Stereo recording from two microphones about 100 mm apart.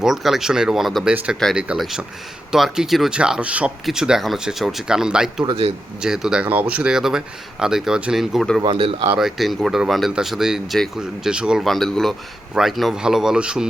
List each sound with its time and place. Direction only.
0.0 s speech: 5° right (ahead or behind)
1.1 s speech: 15° right (ahead or behind)
5.5 s speech: 65° right (ahead or behind)
6.0 s speech: 5° right (ahead or behind)
8.6 s speech: 60° right (ahead or behind)
9.1 s speech: centre (ahead or behind)